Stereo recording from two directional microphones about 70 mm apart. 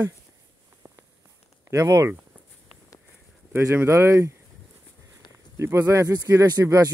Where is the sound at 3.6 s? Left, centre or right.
Right.